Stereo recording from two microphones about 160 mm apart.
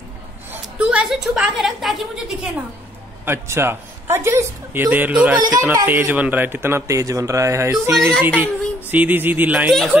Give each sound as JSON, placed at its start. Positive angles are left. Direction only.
{"t": 0.5, "sound": "a woman's voice", "side_deg": -10}
{"t": 3.3, "sound": "speech", "side_deg": -15}
{"t": 5.4, "sound": "speech", "side_deg": -20}